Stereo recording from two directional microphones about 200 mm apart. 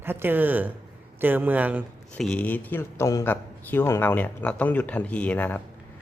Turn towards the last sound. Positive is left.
turn(degrees=10)  # may be behind; listen again after turning